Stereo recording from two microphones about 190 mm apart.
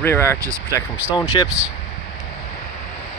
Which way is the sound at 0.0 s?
10° left (ahead or behind).